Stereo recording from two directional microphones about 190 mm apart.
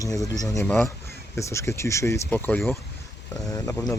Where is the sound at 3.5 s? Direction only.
15° left (ahead or behind).